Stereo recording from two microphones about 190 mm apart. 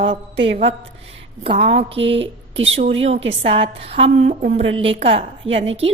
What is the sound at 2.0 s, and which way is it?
Speech, 75° right (ahead or behind).